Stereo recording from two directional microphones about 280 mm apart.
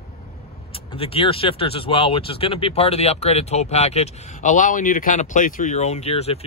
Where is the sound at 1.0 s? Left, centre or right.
Centre.